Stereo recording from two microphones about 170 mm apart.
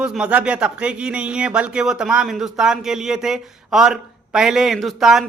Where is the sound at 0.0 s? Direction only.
5° right (ahead or behind).